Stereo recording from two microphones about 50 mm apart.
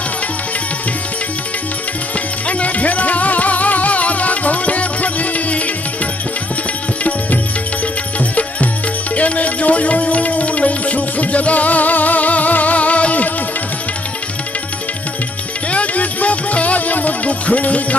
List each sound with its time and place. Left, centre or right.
2.4 s music: left
7.0 s music: left
15.7 s music: left